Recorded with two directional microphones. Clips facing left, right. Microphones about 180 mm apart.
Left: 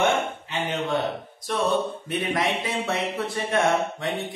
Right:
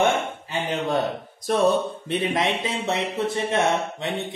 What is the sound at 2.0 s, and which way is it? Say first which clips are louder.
Speech: right 2 dB; 30° right (ahead or behind).